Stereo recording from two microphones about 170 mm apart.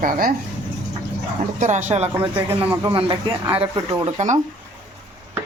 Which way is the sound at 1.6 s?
45° right (ahead or behind).